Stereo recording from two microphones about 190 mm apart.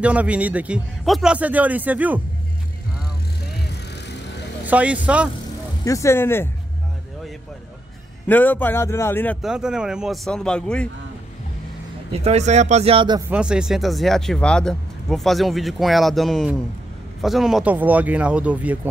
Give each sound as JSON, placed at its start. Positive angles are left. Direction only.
{"t": 0.0, "sound": "a man's voice", "side_deg": -5}
{"t": 4.6, "sound": "a man's voice", "side_deg": -10}
{"t": 5.9, "sound": "speech", "side_deg": 15}
{"t": 8.3, "sound": "speech", "side_deg": 10}
{"t": 9.4, "sound": "speech", "side_deg": -5}
{"t": 12.2, "sound": "speech", "side_deg": -35}
{"t": 13.3, "sound": "a man's voice", "side_deg": -5}